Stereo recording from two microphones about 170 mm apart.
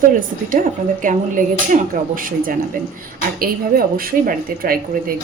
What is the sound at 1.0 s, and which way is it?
Speech, 50° right (ahead or behind).